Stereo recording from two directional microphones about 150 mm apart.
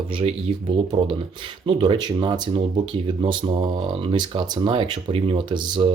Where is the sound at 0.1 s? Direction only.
35° right (ahead or behind).